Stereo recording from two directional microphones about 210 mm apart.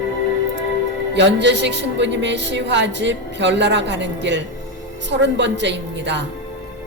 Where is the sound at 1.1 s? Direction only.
55° right (ahead or behind).